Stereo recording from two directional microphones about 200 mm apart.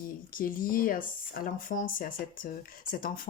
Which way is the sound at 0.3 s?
45° left (ahead or behind).